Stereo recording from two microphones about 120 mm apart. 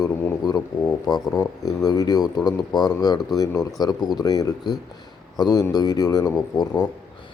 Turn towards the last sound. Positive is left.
turn(degrees=35)  # may be behind; listen again after turning